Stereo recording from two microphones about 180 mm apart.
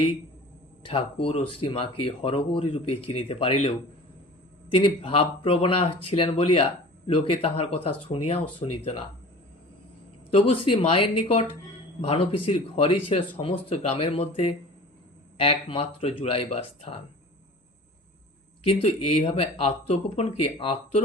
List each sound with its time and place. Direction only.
0.8 s speech: 30° left (ahead or behind)
4.7 s speech: 30° left (ahead or behind)
10.3 s speech: 30° left (ahead or behind)
18.7 s speech: 35° left (ahead or behind)